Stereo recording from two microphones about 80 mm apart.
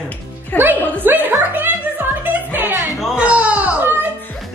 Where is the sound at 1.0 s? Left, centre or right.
Right.